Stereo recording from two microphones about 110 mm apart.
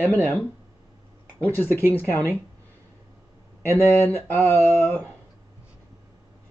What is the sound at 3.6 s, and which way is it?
Speech, 20° left (ahead or behind).